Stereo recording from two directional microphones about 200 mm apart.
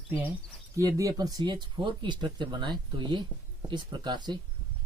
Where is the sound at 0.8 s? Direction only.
15° right (ahead or behind).